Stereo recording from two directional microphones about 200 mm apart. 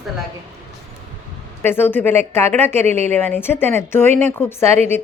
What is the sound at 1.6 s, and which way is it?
Speech, 10° left (ahead or behind).